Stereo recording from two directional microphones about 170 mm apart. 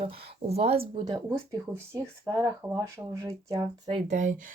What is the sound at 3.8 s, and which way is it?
Speech, 40° right (ahead or behind).